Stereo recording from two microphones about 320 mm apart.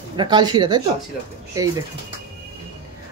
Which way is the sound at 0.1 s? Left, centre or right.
Centre.